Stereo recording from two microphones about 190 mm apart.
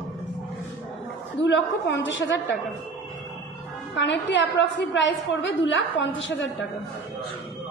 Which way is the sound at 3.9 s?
70° left (ahead or behind).